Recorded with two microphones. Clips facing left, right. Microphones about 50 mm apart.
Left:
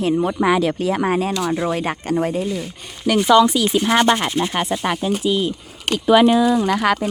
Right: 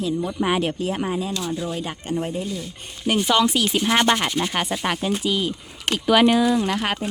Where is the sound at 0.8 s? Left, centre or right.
Left.